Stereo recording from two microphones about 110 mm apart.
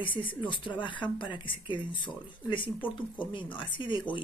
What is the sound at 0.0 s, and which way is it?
Speech, 50° left (ahead or behind).